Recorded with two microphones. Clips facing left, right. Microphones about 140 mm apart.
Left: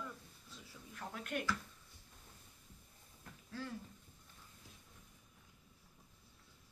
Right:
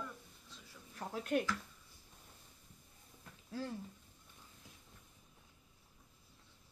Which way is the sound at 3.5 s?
30° right (ahead or behind).